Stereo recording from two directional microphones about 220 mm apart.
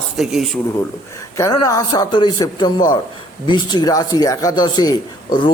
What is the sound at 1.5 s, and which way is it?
A man's voice, 15° left (ahead or behind).